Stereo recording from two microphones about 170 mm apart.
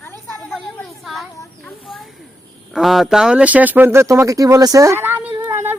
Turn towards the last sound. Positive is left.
turn(degrees=-15)  # may be behind; listen again after turning